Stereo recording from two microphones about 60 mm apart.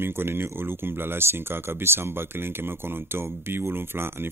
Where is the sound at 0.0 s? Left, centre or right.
Right.